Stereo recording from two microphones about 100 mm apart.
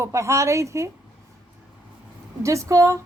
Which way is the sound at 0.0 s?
30° right (ahead or behind).